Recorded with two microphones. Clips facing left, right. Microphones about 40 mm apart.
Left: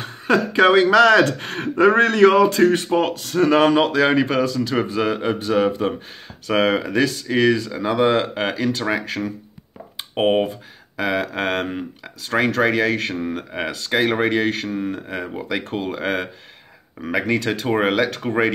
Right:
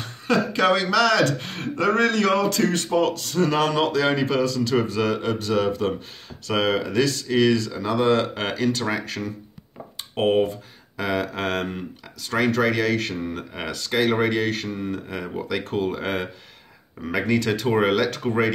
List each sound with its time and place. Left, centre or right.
0.0 s speech: left
10.1 s speech: left
11.0 s speech: centre
17.1 s speech: centre